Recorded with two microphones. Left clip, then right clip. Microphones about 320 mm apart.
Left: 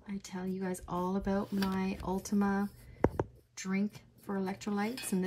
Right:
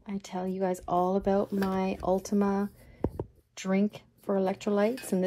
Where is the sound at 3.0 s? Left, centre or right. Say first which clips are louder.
Left 3 dB; right.